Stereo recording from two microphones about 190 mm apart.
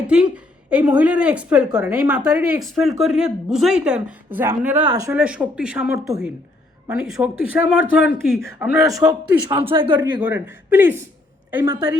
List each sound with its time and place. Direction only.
0.1 s a woman's voice: 5° right (ahead or behind)
8.9 s speech: 15° right (ahead or behind)
10.2 s speech: 10° right (ahead or behind)